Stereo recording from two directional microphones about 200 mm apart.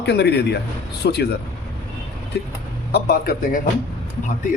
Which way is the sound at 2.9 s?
50° left (ahead or behind).